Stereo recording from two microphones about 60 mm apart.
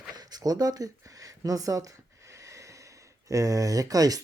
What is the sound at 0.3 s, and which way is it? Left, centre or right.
Speech, right.